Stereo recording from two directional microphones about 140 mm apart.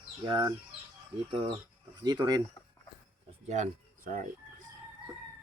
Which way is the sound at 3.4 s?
55° right (ahead or behind).